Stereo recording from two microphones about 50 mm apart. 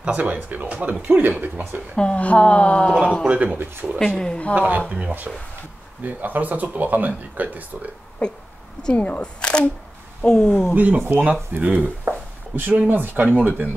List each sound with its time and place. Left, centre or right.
0.0 s speech: right
2.0 s a woman's voice: left
3.3 s speech: right
3.5 s speech: right
4.0 s speech: centre
4.6 s speech: right
4.8 s speech: centre
6.0 s speech: right
8.9 s a woman's voice: left
10.7 s speech: right